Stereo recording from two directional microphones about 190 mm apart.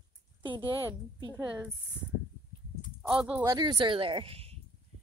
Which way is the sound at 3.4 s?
20° right (ahead or behind).